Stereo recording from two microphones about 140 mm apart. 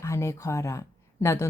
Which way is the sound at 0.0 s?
20° left (ahead or behind).